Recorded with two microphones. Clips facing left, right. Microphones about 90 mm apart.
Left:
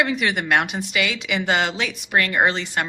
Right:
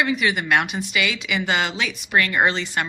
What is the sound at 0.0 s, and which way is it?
A woman's voice, 55° left (ahead or behind).